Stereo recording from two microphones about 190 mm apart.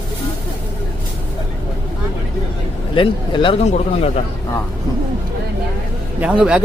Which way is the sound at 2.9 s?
25° left (ahead or behind).